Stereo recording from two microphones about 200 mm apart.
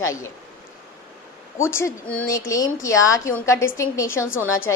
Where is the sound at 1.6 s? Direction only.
10° left (ahead or behind).